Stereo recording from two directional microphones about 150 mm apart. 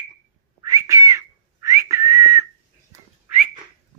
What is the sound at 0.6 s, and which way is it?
Whistling, 25° right (ahead or behind).